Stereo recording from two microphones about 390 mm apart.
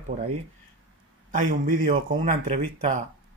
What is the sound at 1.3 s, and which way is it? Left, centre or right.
Speech, centre.